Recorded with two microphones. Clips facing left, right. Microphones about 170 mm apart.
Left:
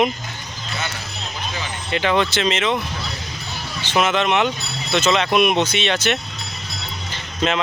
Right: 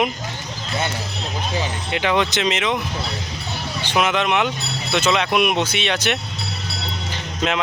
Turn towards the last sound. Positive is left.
turn(degrees=-10)  # may be behind; listen again after turning